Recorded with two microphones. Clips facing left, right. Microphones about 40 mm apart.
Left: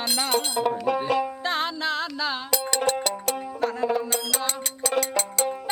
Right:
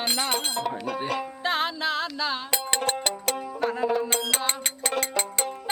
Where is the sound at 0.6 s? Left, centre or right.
Centre.